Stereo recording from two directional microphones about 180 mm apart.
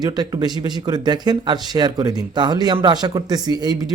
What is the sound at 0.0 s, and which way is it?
Speech, 20° right (ahead or behind).